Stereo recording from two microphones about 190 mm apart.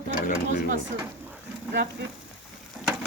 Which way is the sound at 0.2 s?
45° left (ahead or behind).